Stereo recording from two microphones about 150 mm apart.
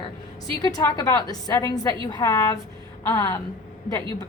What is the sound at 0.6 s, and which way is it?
A woman's voice, 25° left (ahead or behind).